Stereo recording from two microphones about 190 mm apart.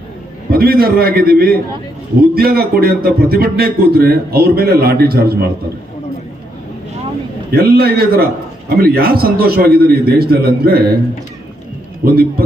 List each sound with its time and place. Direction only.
0.5 s a man's voice: 50° right (ahead or behind)
7.5 s a man's voice: 55° right (ahead or behind)
12.0 s a man's voice: 55° right (ahead or behind)